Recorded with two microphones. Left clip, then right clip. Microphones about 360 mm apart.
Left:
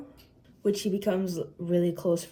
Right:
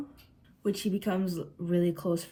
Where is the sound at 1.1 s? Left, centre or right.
Left.